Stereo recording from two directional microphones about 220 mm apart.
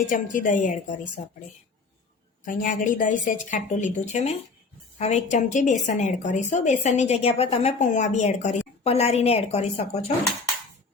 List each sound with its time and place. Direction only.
0.1 s a woman's voice: 35° left (ahead or behind)
2.4 s a woman's voice: 35° left (ahead or behind)